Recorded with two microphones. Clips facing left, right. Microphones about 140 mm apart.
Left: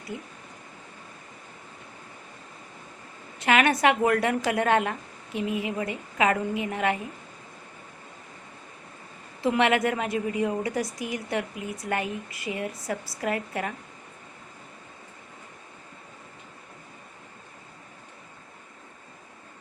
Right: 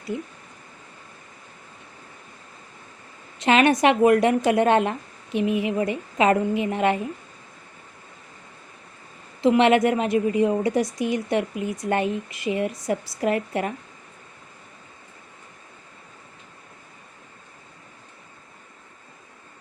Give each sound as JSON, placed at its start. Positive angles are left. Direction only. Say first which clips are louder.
{"t": 0.1, "sound": "a woman's voice", "louder": "right 7 dB", "side_deg": -20}
{"t": 3.3, "sound": "a woman's voice", "louder": "right 4 dB", "side_deg": -20}
{"t": 9.4, "sound": "a woman's voice", "louder": "right 6 dB", "side_deg": -20}